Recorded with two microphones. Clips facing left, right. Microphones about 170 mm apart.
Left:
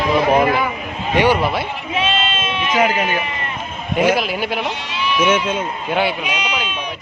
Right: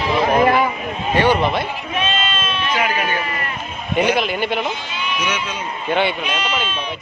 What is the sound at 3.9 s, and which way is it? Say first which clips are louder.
Speech: left 1 dB; centre (ahead or behind).